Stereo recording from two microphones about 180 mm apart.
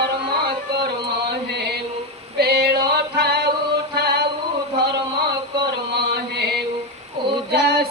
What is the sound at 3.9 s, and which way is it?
Music, 65° right (ahead or behind).